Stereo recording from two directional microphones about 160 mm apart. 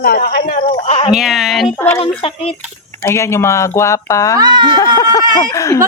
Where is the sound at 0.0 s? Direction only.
70° left (ahead or behind).